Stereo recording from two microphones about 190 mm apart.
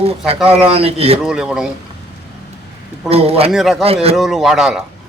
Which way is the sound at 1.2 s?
5° right (ahead or behind).